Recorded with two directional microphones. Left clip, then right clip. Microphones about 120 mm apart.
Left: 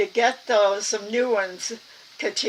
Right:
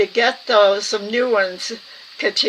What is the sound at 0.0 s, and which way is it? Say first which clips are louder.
Speech: right 4 dB; 35° right (ahead or behind).